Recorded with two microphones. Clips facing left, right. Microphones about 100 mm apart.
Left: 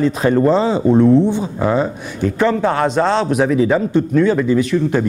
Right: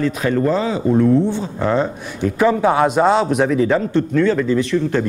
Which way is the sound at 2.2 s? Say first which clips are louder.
Even; 10° right (ahead or behind).